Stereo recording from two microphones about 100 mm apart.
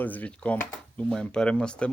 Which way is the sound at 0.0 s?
15° left (ahead or behind).